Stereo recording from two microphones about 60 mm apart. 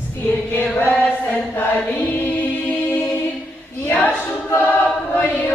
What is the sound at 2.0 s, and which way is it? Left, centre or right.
Music, left.